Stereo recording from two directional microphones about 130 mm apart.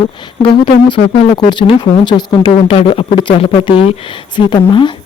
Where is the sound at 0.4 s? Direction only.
40° left (ahead or behind).